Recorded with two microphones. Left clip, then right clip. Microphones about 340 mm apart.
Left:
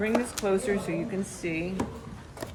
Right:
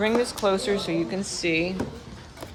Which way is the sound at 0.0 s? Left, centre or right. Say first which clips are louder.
Right 5 dB; centre.